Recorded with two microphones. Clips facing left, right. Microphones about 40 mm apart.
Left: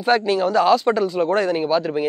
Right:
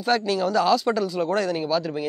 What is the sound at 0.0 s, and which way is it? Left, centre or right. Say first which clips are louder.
Speech: left 4 dB; left.